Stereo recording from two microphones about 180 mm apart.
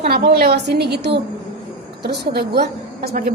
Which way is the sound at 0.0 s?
60° right (ahead or behind).